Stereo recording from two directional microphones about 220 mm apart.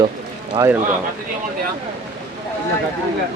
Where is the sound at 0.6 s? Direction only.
15° right (ahead or behind).